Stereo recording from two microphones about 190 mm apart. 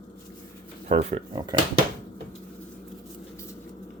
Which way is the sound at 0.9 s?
30° right (ahead or behind).